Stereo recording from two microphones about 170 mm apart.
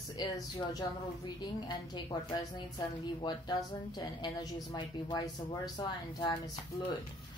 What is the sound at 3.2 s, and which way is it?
A woman's voice, 25° left (ahead or behind).